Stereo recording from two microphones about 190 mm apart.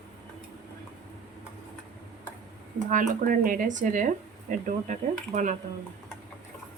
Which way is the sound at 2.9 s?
45° right (ahead or behind).